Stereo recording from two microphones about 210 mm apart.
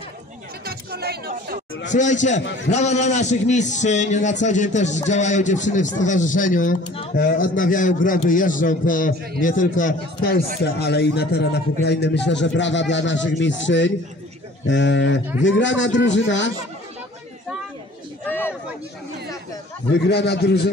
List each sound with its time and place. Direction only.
0.7 s music: 50° right (ahead or behind)
1.9 s a man's voice: 35° left (ahead or behind); by 16.5 s 60° left (ahead or behind)
18.2 s a sound: 10° left (ahead or behind)
19.9 s a man's voice: 55° left (ahead or behind)